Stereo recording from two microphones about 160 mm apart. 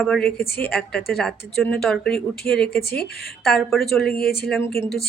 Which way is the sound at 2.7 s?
75° left (ahead or behind).